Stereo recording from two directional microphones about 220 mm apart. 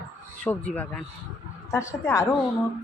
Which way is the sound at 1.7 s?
15° left (ahead or behind).